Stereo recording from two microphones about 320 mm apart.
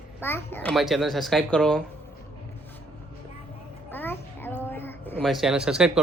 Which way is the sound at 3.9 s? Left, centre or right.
Centre.